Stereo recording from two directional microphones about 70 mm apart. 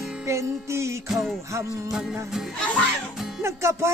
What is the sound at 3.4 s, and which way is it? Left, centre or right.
Music, right.